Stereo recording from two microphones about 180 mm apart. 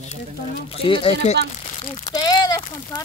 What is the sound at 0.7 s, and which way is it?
Speech, 30° left (ahead or behind).